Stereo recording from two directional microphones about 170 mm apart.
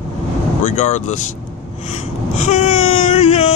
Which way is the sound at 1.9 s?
40° left (ahead or behind).